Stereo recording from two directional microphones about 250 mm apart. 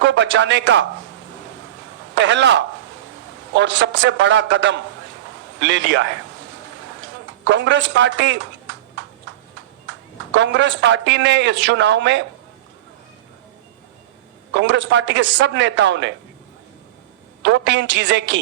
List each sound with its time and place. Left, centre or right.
0.0 s a man's voice: right
2.1 s speech: right
7.4 s speech: right
10.3 s speech: right
14.5 s speech: right
17.4 s speech: right